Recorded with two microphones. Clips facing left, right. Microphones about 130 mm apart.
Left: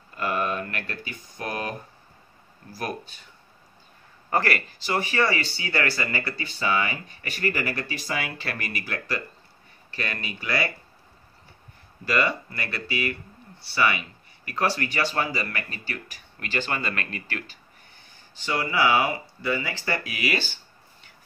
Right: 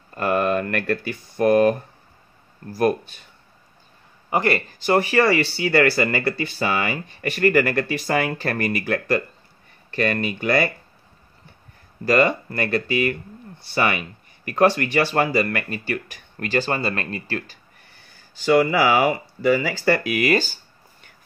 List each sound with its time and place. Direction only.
0.1 s a sound: 50° right (ahead or behind)
1.4 s speech: 55° right (ahead or behind)
4.3 s speech: 20° right (ahead or behind)
4.7 s speech: 55° right (ahead or behind)
12.0 s speech: 45° right (ahead or behind)
18.3 s speech: 75° right (ahead or behind)
20.2 s speech: 45° right (ahead or behind)